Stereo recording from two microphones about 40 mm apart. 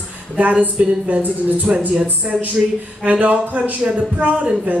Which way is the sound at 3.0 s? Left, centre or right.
Right.